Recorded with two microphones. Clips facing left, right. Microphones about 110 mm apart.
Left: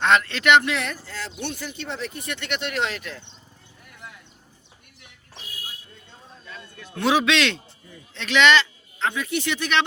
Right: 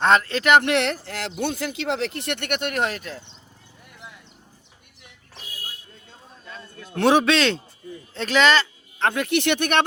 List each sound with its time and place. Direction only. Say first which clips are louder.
0.0 s speech: right 1 dB; 35° right (ahead or behind)
0.6 s speech: right 6 dB; 70° right (ahead or behind); by 3.2 s 35° right (ahead or behind)
7.0 s speech: right 3 dB; 45° right (ahead or behind)
9.0 s speech: right 4 dB; 60° right (ahead or behind)